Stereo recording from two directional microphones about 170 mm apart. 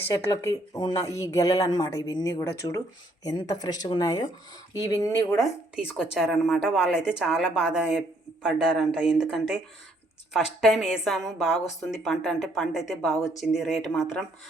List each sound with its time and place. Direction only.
0.0 s speech: 15° left (ahead or behind)
5.4 s speech: 5° right (ahead or behind)